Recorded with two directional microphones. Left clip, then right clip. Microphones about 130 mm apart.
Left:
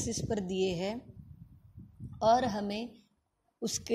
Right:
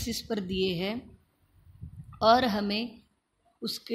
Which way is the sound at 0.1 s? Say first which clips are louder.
Right 3 dB; 15° left (ahead or behind).